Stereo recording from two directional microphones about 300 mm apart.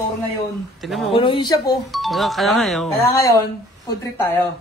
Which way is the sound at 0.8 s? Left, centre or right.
Centre.